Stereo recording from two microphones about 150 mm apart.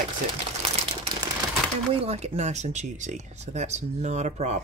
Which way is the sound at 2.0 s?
45° right (ahead or behind).